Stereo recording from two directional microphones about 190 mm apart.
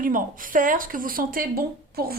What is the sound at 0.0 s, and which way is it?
A woman's voice, 45° right (ahead or behind).